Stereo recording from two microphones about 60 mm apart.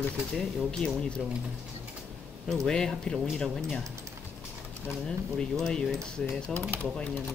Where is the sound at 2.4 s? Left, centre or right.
Centre.